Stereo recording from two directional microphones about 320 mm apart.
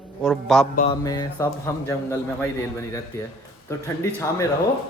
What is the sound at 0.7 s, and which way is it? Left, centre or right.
A man's voice, centre.